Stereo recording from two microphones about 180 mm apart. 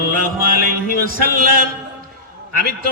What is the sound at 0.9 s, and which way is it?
A man's voice, 55° left (ahead or behind).